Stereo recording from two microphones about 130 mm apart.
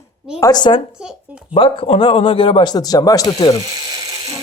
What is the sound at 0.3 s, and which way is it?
Speech, 30° left (ahead or behind).